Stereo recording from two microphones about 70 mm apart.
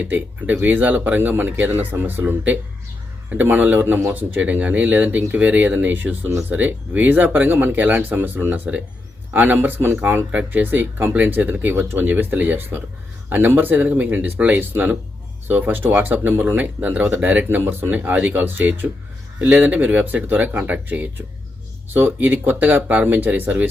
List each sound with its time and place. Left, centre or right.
0.0 s speech: right